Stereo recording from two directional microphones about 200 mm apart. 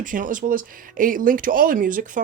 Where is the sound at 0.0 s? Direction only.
40° right (ahead or behind).